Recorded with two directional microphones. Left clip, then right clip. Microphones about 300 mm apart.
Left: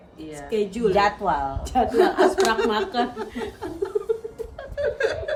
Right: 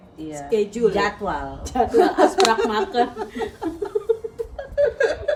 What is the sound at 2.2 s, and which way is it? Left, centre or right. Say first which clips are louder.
Speech: right 3 dB; centre.